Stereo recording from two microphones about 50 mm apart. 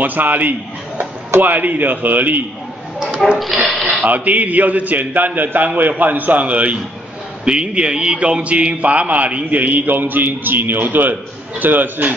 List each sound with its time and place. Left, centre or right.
0.0 s a man's voice: right
3.2 s speech: centre
4.0 s a man's voice: right